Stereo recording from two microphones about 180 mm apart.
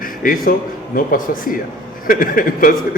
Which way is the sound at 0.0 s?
50° left (ahead or behind).